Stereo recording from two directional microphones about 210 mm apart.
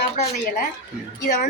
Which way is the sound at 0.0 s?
45° left (ahead or behind).